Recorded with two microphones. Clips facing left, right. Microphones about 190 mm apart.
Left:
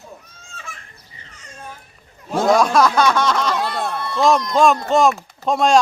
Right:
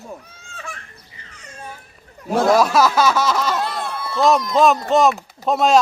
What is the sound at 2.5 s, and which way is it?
Speech, 5° right (ahead or behind).